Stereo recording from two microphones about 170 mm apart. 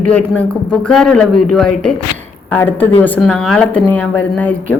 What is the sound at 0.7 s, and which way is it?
A woman's voice, 5° left (ahead or behind).